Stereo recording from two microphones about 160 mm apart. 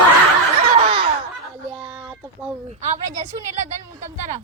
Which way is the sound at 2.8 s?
45° right (ahead or behind).